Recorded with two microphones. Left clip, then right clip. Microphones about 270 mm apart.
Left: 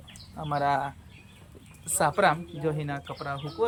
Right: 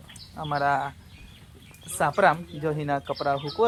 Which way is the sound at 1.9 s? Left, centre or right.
Centre.